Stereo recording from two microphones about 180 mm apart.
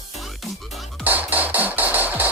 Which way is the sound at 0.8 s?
10° right (ahead or behind).